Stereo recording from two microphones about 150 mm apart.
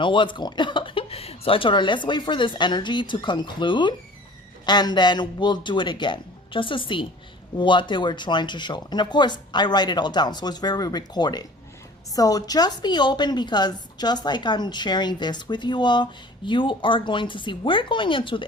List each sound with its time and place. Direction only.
0.0 s a woman's voice: 35° left (ahead or behind)